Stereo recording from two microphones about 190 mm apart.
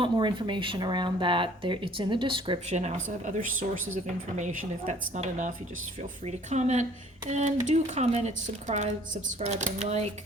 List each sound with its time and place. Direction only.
0.0 s speech: 25° right (ahead or behind)
4.4 s speech: 40° right (ahead or behind)